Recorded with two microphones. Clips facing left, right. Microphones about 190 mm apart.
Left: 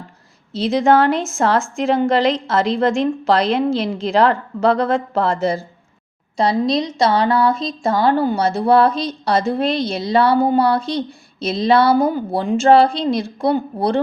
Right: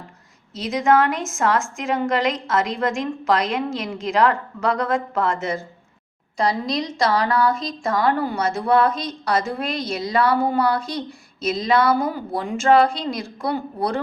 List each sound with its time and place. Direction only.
0.5 s a woman's voice: 30° left (ahead or behind)